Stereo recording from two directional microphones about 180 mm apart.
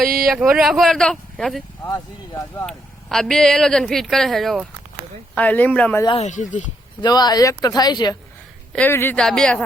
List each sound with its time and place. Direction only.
0.3 s speech: 5° right (ahead or behind)
1.9 s speech: 15° left (ahead or behind)
2.6 s speech: centre (ahead or behind)
6.1 s speech: 40° left (ahead or behind)
7.0 s speech: 20° left (ahead or behind)
8.7 s speech: 10° left (ahead or behind)